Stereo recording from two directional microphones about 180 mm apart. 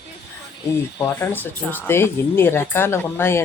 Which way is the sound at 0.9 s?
15° left (ahead or behind).